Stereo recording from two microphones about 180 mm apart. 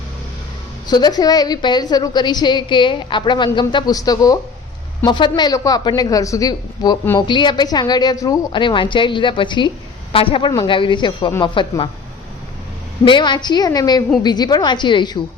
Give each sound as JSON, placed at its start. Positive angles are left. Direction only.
{"t": 0.9, "sound": "a woman's voice", "side_deg": 20}
{"t": 13.1, "sound": "a woman's voice", "side_deg": 25}